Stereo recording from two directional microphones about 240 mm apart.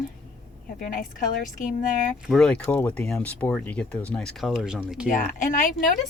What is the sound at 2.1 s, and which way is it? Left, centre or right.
Speech, centre.